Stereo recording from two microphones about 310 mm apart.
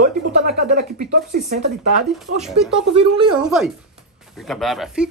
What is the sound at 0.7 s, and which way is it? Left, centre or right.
Speech, right.